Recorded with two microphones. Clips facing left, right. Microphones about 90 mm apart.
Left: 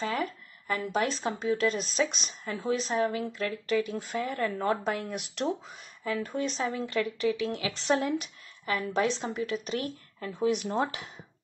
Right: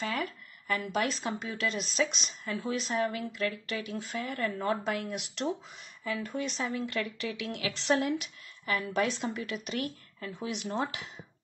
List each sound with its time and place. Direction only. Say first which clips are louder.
0.0 s speech: left 3 dB; 35° left (ahead or behind)
3.9 s speech: left 3 dB; 45° left (ahead or behind)
6.0 s speech: left 3 dB; 35° left (ahead or behind)